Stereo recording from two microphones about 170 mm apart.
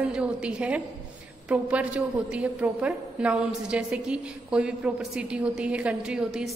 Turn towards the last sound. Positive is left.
turn(degrees=-5)  # may be behind; listen again after turning